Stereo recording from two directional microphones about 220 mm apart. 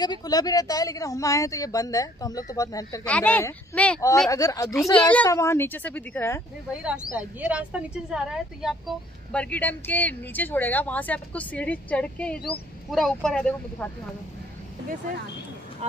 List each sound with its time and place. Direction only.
0.0 s a woman's voice: 20° left (ahead or behind)
6.7 s a woman's voice: 5° right (ahead or behind)